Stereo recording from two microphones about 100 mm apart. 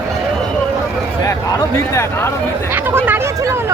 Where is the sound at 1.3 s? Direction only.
30° left (ahead or behind).